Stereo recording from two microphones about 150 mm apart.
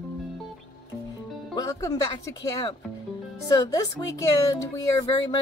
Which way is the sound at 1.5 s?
25° left (ahead or behind).